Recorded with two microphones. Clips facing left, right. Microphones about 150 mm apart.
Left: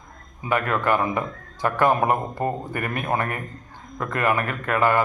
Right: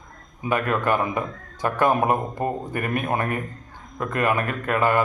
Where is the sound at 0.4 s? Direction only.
20° right (ahead or behind).